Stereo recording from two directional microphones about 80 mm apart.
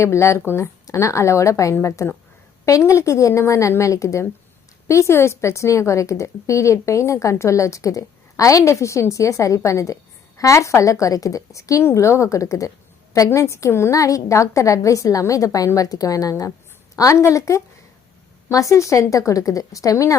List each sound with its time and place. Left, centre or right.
0.0 s a woman's voice: left
13.4 s a woman's voice: left